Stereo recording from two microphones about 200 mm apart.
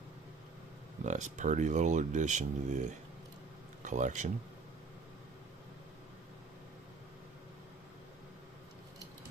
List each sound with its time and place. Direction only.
1.0 s speech: 35° right (ahead or behind)